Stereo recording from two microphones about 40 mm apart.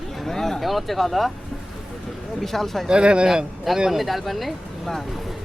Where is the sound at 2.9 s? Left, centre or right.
Right.